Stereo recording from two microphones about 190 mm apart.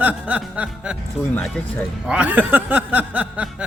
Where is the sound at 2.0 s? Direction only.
5° right (ahead or behind).